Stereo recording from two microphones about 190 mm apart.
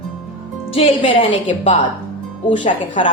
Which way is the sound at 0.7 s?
30° left (ahead or behind).